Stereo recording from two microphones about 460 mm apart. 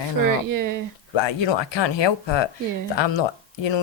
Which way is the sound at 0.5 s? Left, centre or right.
Right.